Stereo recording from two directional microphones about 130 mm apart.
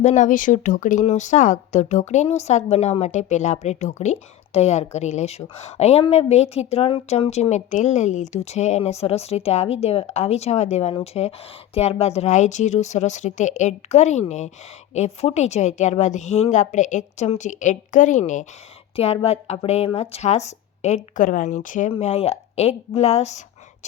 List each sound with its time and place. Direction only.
0.0 s speech: 70° left (ahead or behind); by 1.0 s 90° left
1.0 s a woman's voice: 70° left (ahead or behind)
18.9 s speech: 50° left (ahead or behind); by 21.8 s 85° left
21.8 s speech: 50° left (ahead or behind)